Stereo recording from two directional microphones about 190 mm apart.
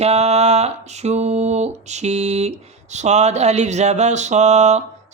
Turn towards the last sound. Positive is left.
turn(degrees=-35)  # may be behind; listen again after turning